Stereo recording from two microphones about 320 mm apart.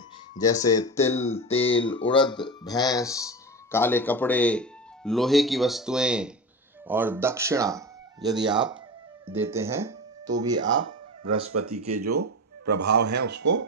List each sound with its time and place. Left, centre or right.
0.4 s speech: centre
10.8 s speech: right